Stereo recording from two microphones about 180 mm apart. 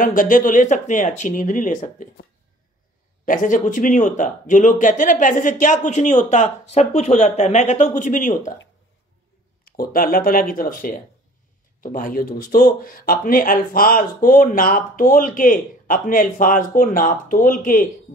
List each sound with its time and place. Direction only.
0.0 s speech: 50° left (ahead or behind)
3.3 s speech: 45° left (ahead or behind)
9.7 s speech: 55° left (ahead or behind)